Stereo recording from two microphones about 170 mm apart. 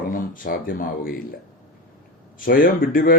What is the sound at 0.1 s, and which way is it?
Speech, 55° left (ahead or behind).